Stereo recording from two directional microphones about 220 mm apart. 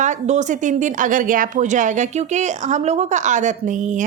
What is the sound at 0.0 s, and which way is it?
A woman's voice, 35° right (ahead or behind).